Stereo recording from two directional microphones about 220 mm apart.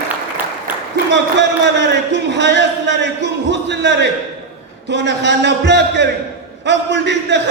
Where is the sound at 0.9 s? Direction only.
55° right (ahead or behind).